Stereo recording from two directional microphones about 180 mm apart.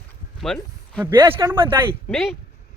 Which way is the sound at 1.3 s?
15° right (ahead or behind).